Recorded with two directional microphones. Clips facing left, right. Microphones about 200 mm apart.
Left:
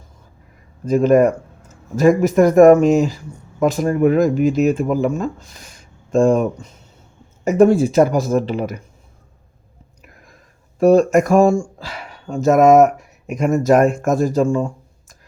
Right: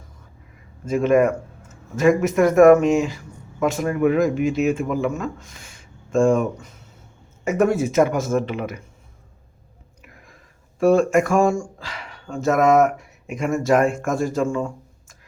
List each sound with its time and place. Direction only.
0.9 s speech: 35° left (ahead or behind)
10.8 s speech: 40° left (ahead or behind)